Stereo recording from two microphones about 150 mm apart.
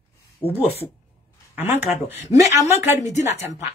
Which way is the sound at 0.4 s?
40° left (ahead or behind).